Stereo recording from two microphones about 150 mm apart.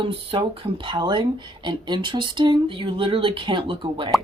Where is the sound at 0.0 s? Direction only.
35° right (ahead or behind).